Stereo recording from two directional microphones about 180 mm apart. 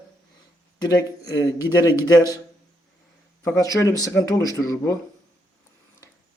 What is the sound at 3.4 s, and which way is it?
Speech, 15° left (ahead or behind).